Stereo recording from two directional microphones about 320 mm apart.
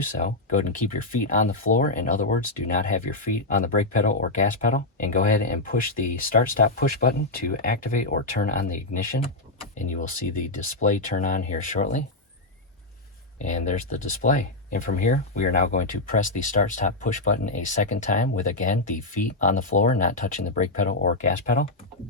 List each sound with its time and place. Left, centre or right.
0.0 s speech: left
13.4 s speech: left